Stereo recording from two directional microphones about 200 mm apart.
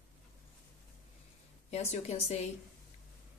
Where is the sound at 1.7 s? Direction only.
30° left (ahead or behind).